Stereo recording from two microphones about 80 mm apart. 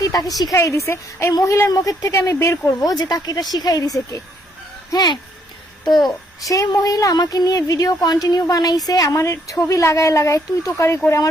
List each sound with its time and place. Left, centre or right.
0.0 s a woman's voice: left
0.5 s speech: left
2.8 s speech: left
4.9 s a child's voice: left
5.9 s a child's voice: centre
6.4 s speech: left